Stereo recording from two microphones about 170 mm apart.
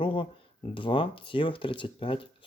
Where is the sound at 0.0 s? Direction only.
30° left (ahead or behind).